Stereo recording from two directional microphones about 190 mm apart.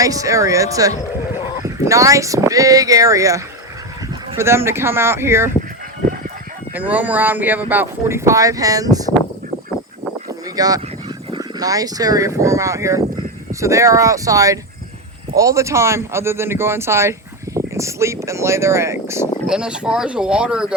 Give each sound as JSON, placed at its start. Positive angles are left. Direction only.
{"t": 0.0, "sound": "speech", "side_deg": -15}
{"t": 6.7, "sound": "speech", "side_deg": -10}
{"t": 10.2, "sound": "a sound", "side_deg": -20}
{"t": 11.3, "sound": "speech", "side_deg": -20}